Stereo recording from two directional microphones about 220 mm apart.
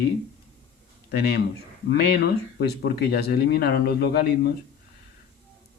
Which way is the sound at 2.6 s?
45° left (ahead or behind).